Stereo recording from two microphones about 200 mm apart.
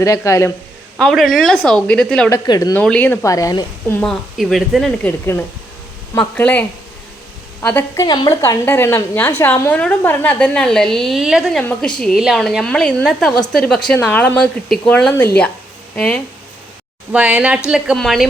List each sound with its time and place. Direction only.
0.0 s a woman's voice: 15° left (ahead or behind)
0.9 s speech: centre (ahead or behind)
2.5 s a woman's voice: 15° left (ahead or behind)
4.0 s a woman's voice: centre (ahead or behind)
8.0 s a woman's voice: 20° left (ahead or behind)
17.1 s speech: 5° right (ahead or behind)